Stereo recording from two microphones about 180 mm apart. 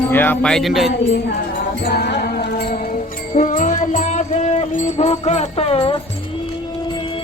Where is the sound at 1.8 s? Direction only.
60° left (ahead or behind).